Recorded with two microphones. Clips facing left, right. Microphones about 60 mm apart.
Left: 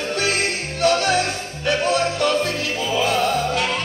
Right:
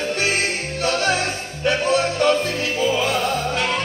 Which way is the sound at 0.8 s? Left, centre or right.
Right.